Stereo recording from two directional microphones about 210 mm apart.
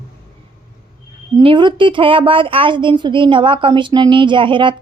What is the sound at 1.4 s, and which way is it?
A woman's voice, 25° right (ahead or behind).